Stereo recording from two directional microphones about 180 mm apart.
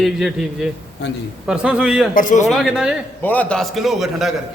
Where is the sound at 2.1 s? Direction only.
45° left (ahead or behind).